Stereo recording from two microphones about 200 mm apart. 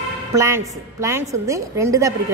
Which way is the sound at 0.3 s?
15° right (ahead or behind).